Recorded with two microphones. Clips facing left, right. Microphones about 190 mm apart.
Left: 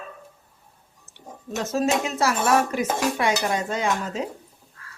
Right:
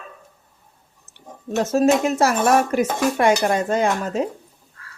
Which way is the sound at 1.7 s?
45° right (ahead or behind).